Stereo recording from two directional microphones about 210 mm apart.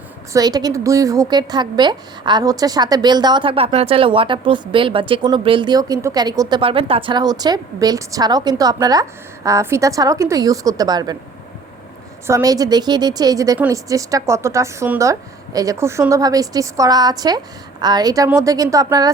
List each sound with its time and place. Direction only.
0.3 s a woman's voice: 20° right (ahead or behind)
12.3 s a woman's voice: 15° right (ahead or behind)